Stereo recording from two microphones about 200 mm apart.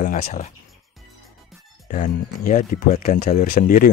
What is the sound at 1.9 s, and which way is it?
Speech, 45° left (ahead or behind).